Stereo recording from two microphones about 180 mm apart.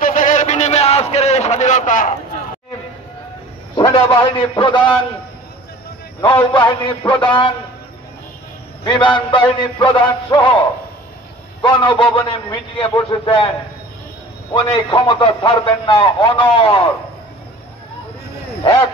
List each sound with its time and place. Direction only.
0.0 s a sound: 45° left (ahead or behind)
3.7 s a man's voice: 25° left (ahead or behind)
6.2 s a man's voice: 25° left (ahead or behind)
8.8 s a man's voice: 25° left (ahead or behind)
11.6 s a man's voice: 25° left (ahead or behind)
14.5 s a man's voice: 25° left (ahead or behind)
18.6 s speech: 30° left (ahead or behind)